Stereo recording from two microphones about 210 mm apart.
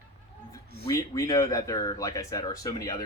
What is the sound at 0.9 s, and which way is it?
Speech, 15° left (ahead or behind).